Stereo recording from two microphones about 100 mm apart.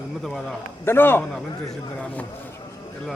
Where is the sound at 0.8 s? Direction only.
20° left (ahead or behind).